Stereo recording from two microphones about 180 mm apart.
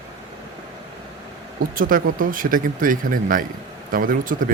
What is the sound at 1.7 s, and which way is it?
Speech, 50° right (ahead or behind).